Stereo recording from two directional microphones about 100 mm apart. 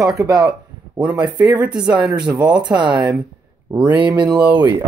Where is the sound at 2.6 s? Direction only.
50° right (ahead or behind).